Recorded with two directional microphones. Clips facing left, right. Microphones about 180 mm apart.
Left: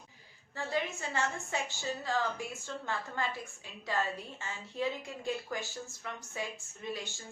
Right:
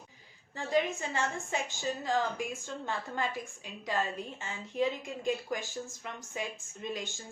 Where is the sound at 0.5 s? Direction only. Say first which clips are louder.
Right 5 dB; 15° right (ahead or behind).